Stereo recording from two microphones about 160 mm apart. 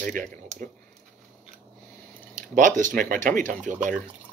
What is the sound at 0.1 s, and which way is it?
Speech, 60° right (ahead or behind).